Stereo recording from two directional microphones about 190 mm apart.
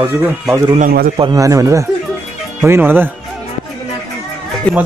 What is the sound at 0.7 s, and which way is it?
Speech, 50° right (ahead or behind).